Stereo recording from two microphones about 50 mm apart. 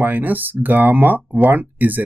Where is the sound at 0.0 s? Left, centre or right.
Right.